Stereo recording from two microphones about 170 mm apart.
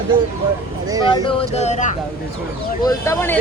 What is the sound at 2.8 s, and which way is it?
Speech, 20° left (ahead or behind).